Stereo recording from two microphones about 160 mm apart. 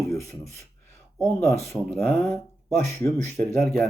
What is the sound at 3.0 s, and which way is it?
Speech, 15° left (ahead or behind).